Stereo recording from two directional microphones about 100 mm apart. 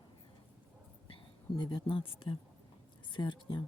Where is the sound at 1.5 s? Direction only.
50° left (ahead or behind).